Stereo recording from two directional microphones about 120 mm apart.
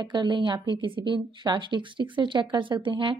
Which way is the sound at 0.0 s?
40° right (ahead or behind).